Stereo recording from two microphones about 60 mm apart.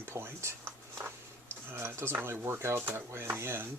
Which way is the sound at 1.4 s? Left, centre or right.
Right.